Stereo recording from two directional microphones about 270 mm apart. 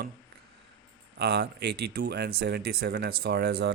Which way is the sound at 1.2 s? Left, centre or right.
Right.